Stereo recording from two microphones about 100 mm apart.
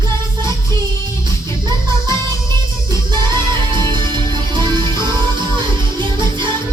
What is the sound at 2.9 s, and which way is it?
Music, 50° right (ahead or behind).